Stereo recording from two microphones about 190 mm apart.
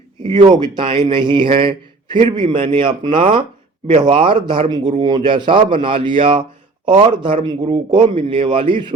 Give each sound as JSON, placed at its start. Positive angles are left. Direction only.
{"t": 0.4, "sound": "speech", "side_deg": -25}